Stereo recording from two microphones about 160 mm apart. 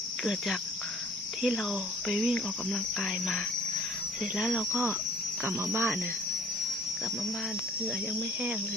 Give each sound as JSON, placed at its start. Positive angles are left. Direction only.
{"t": 0.3, "sound": "speech", "side_deg": 0}